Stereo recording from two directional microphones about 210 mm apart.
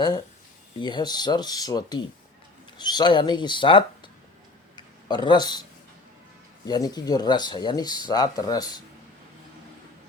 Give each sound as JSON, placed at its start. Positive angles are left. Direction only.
{"t": 0.8, "sound": "speech", "side_deg": 20}
{"t": 6.7, "sound": "speech", "side_deg": 20}